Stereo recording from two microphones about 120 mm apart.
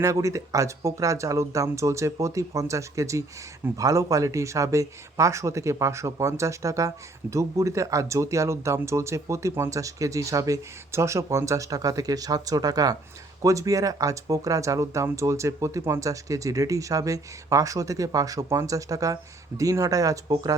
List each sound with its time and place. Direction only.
0.0 s speech: 25° right (ahead or behind)